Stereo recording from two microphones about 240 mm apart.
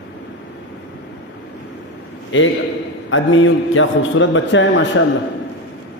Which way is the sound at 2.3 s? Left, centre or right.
Left.